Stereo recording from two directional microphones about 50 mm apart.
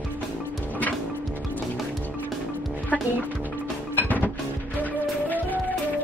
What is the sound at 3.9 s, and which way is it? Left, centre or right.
Music, left.